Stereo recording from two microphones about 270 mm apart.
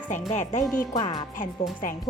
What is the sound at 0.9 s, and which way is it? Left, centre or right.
Speech, centre.